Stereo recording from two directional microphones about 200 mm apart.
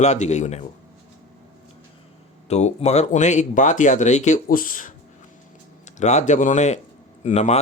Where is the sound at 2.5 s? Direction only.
35° left (ahead or behind).